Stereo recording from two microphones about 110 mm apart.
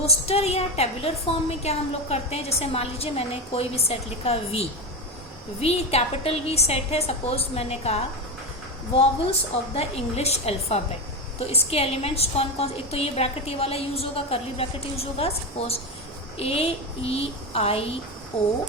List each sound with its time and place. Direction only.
0.0 s a woman's voice: 65° left (ahead or behind)
9.7 s a woman's voice: 75° left (ahead or behind)